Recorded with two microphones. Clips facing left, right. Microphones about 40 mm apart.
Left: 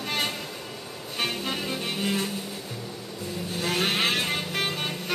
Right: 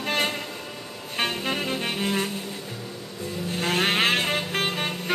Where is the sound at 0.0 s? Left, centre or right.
Right.